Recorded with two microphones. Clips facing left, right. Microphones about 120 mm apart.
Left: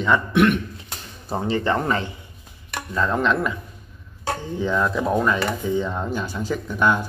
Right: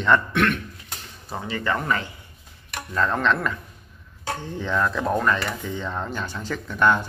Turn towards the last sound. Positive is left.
turn(degrees=10)  # may be behind; listen again after turning